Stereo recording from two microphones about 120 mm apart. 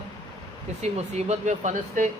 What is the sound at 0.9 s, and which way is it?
Speech, 70° right (ahead or behind).